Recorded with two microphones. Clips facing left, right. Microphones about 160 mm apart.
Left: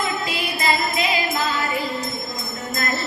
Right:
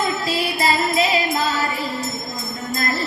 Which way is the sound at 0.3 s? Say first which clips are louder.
Right 3 dB; 35° right (ahead or behind).